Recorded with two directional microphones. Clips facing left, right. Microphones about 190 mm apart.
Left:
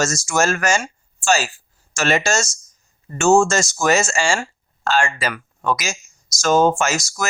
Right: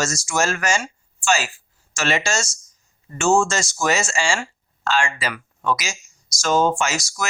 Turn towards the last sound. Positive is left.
turn(degrees=45)  # may be behind; listen again after turning